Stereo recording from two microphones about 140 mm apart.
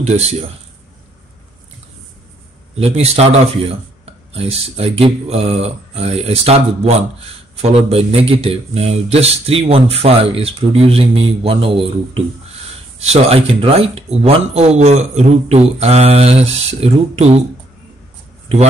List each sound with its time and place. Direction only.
0.0 s speech: 50° right (ahead or behind)
2.7 s speech: 45° right (ahead or behind)